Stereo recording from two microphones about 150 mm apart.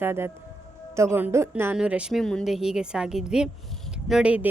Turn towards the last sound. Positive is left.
turn(degrees=-10)  # may be behind; listen again after turning